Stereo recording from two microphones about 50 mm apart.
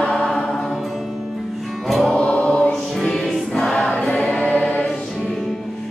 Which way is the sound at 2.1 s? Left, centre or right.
Left.